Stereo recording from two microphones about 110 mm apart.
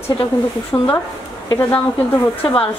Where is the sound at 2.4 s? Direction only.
55° left (ahead or behind).